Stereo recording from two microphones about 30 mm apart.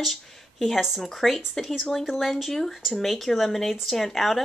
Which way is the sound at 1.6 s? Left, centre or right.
Centre.